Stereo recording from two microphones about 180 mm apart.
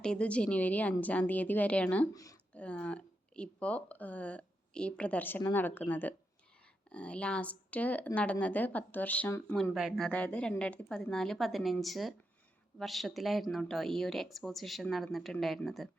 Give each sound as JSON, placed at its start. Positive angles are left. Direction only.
{"t": 0.0, "sound": "speech", "side_deg": 5}
{"t": 2.1, "sound": "speech", "side_deg": 20}
{"t": 2.5, "sound": "speech", "side_deg": 5}
{"t": 9.7, "sound": "a woman's voice", "side_deg": 0}